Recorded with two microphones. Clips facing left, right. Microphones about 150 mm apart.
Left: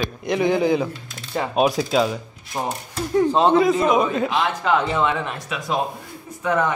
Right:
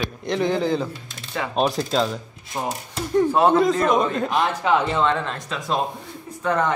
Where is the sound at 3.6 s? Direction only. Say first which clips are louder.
Left 1 dB; 10° left (ahead or behind).